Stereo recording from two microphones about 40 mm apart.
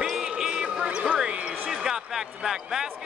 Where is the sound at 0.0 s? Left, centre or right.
Centre; by 1.5 s right.